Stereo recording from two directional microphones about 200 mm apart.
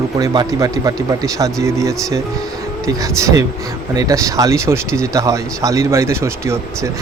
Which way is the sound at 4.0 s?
15° right (ahead or behind).